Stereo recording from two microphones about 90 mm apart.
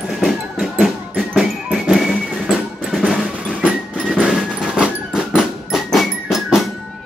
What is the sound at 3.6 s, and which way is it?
Train, 5° right (ahead or behind).